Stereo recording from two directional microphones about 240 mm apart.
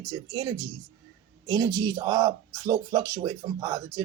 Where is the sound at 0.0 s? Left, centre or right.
Centre.